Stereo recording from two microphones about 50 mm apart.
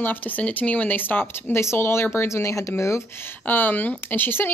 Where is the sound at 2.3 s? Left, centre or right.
Left.